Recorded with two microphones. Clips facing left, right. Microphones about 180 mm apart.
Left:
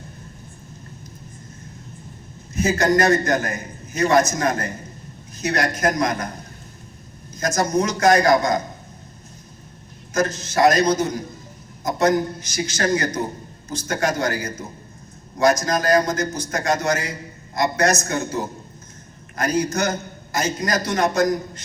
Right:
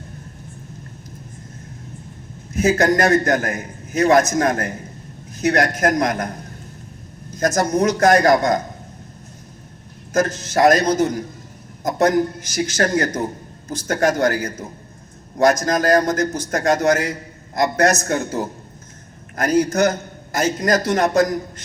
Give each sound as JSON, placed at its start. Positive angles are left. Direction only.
{"t": 2.5, "sound": "a man's voice", "side_deg": -55}
{"t": 7.3, "sound": "a man's voice", "side_deg": -50}
{"t": 10.1, "sound": "a man's voice", "side_deg": -50}
{"t": 19.4, "sound": "a man's voice", "side_deg": -55}